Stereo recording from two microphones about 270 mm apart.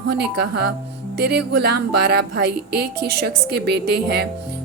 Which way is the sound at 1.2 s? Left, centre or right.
Right.